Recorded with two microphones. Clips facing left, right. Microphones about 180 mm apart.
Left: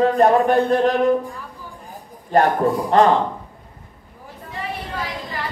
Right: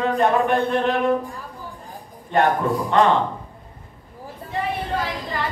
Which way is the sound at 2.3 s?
35° left (ahead or behind).